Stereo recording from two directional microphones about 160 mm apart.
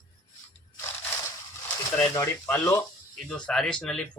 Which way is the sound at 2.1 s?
15° left (ahead or behind).